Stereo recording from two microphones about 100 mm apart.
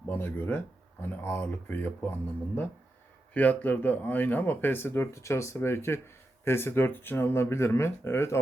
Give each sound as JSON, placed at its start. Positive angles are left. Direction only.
{"t": 0.1, "sound": "speech", "side_deg": 15}
{"t": 3.3, "sound": "speech", "side_deg": 15}